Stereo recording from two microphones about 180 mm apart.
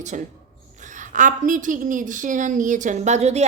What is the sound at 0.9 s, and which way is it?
Speech, 45° right (ahead or behind).